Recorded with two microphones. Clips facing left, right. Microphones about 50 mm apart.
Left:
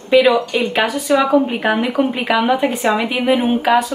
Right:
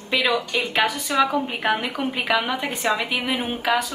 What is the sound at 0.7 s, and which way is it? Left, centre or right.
Speech, left.